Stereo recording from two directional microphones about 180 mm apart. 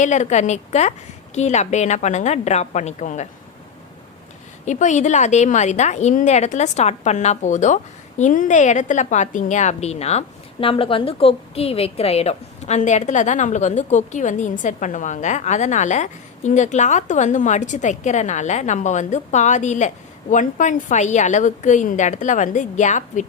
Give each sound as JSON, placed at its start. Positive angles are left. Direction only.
{"t": 0.0, "sound": "a woman's voice", "side_deg": 40}
{"t": 4.6, "sound": "a woman's voice", "side_deg": 40}